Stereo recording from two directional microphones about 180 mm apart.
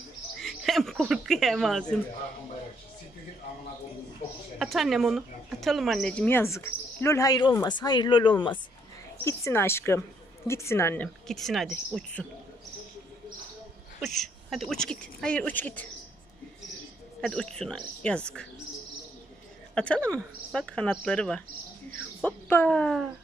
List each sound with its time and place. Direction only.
0.4 s speech: centre (ahead or behind)
4.6 s speech: centre (ahead or behind); by 8.5 s 25° left (ahead or behind)
9.2 s speech: 15° left (ahead or behind)
11.2 s speech: centre (ahead or behind)
14.0 s speech: centre (ahead or behind)
17.2 s speech: 5° left (ahead or behind)
19.7 s speech: 5° left (ahead or behind)